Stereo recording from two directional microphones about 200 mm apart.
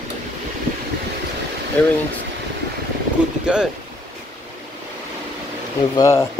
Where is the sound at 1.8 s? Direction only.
5° left (ahead or behind).